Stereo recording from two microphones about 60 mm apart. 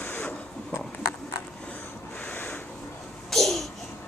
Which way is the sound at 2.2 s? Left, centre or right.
Left.